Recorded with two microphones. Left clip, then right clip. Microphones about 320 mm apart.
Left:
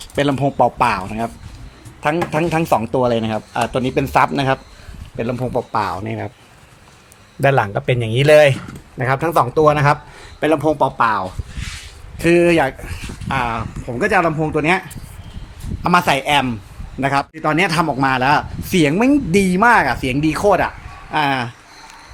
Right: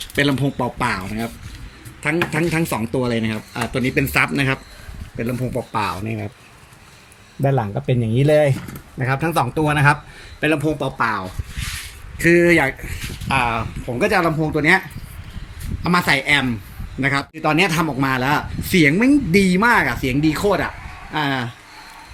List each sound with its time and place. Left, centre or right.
0.0 s a man's voice: centre
6.1 s speech: left
7.4 s speech: left
10.8 s speech: centre
12.2 s a man's voice: centre
15.8 s a man's voice: centre